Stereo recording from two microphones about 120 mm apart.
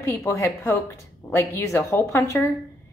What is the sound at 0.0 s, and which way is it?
A woman's voice, 25° left (ahead or behind).